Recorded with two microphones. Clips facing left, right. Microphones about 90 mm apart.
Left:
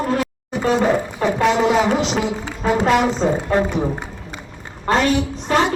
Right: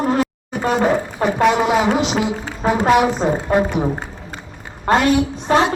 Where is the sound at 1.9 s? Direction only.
60° right (ahead or behind).